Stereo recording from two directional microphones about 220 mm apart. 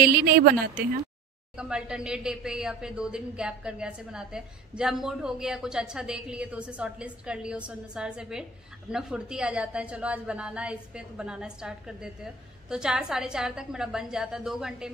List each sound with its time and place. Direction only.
0.0 s a woman's voice: 45° right (ahead or behind)
1.6 s a woman's voice: 5° right (ahead or behind)